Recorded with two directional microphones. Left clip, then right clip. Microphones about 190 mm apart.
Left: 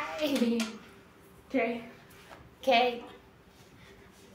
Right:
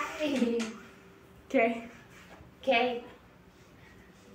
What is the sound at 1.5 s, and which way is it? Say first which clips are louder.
Speech: right 4 dB; 55° right (ahead or behind).